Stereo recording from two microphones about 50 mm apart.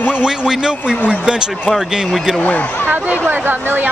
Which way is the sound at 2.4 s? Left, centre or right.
Left.